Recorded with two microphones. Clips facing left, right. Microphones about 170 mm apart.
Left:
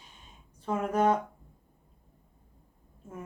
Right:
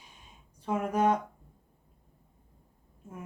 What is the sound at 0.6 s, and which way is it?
Speech, 10° right (ahead or behind).